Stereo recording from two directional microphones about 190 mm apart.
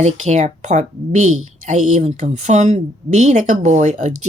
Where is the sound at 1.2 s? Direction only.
90° right.